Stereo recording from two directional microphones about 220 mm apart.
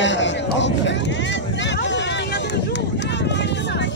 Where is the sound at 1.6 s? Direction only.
55° left (ahead or behind).